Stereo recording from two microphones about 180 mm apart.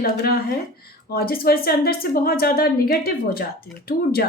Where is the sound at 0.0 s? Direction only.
55° left (ahead or behind).